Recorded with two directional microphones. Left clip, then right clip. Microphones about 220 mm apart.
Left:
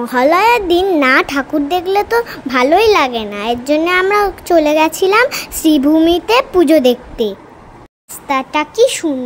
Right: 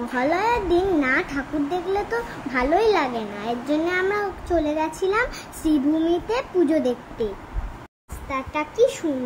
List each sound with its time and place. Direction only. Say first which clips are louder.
0.1 s a child's voice: left 11 dB; 40° left (ahead or behind)
8.3 s a child's voice: left 11 dB; 40° left (ahead or behind)